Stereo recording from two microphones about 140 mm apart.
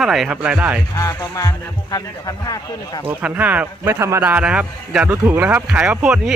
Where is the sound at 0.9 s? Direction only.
25° left (ahead or behind).